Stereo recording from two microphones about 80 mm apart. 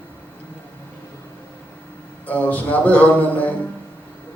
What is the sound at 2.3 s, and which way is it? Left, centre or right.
Speech, centre.